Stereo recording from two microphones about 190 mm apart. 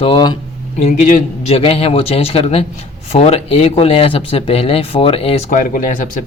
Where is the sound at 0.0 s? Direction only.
25° left (ahead or behind).